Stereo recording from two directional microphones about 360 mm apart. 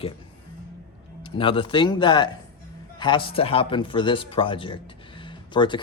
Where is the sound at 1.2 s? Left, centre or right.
Centre.